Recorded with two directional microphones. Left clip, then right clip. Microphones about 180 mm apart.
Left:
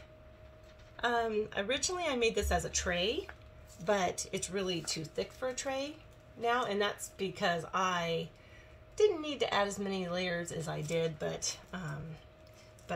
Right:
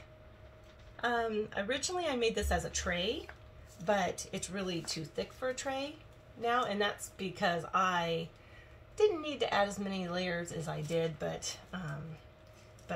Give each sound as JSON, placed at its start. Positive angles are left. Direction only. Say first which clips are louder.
{"t": 1.0, "sound": "speech", "louder": "left 1 dB", "side_deg": 5}
{"t": 2.0, "sound": "a woman's voice", "louder": "even", "side_deg": 15}
{"t": 2.4, "sound": "speech", "louder": "left 1 dB", "side_deg": 0}
{"t": 2.9, "sound": "a woman's voice", "louder": "left 2 dB", "side_deg": 20}